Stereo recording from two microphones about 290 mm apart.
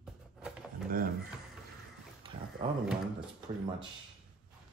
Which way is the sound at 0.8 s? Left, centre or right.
Right.